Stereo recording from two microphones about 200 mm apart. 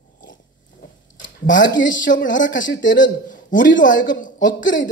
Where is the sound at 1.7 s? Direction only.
40° left (ahead or behind).